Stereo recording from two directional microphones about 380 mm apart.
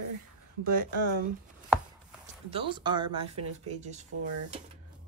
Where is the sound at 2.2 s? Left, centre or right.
Centre.